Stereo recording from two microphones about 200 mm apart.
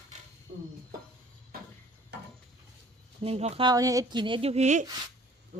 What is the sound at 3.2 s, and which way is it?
Speech, 30° right (ahead or behind).